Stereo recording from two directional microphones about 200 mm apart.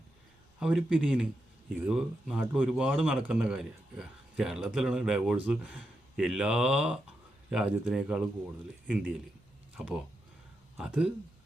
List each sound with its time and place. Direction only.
0.6 s speech: 5° right (ahead or behind)
10.8 s speech: 5° right (ahead or behind)